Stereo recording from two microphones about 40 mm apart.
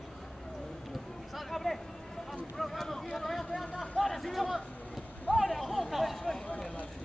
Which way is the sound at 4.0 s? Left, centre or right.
Centre.